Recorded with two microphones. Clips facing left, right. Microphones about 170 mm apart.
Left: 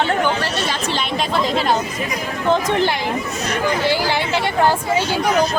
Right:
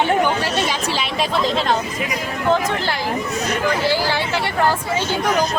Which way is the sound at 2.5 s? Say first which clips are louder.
Left 2 dB; 20° left (ahead or behind).